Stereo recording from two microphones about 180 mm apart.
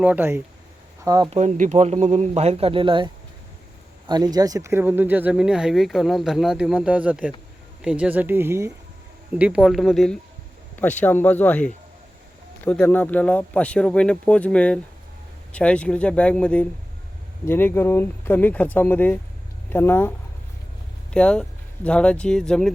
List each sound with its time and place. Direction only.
0.0 s speech: 10° right (ahead or behind)
1.3 s speech: 40° right (ahead or behind); by 22.7 s 5° left (ahead or behind)